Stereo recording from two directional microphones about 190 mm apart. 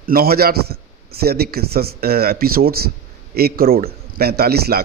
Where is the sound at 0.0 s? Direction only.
50° right (ahead or behind).